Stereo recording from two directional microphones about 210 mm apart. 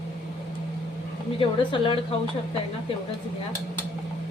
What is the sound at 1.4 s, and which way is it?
Speech, 25° left (ahead or behind).